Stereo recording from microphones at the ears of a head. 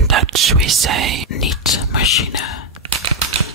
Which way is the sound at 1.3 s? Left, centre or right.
Left.